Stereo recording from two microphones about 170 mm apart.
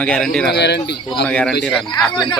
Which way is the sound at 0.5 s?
80° left.